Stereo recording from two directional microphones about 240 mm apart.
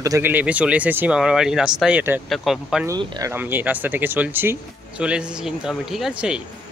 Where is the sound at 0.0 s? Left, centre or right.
Centre.